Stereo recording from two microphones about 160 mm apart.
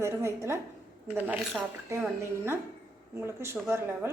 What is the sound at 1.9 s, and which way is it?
A woman's voice, 15° right (ahead or behind).